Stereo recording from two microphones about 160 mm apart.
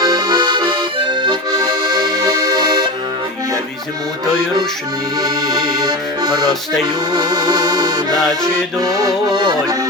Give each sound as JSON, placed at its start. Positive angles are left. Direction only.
{"t": 0.0, "sound": "accordion", "side_deg": -25}
{"t": 5.2, "sound": "music", "side_deg": -25}